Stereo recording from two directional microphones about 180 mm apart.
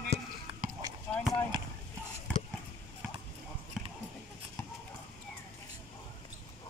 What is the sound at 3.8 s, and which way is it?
Basketball bounce, 5° right (ahead or behind).